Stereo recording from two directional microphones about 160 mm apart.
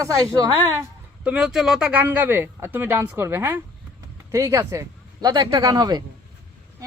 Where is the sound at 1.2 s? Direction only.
5° right (ahead or behind); by 6.0 s 25° right (ahead or behind).